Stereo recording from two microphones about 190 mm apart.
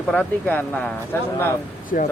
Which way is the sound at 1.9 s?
45° left (ahead or behind).